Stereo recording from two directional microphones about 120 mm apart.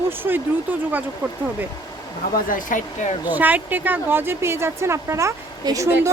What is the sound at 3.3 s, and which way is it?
Speech, 15° right (ahead or behind).